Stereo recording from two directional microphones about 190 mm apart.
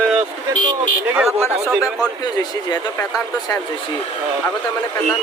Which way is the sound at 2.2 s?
20° left (ahead or behind).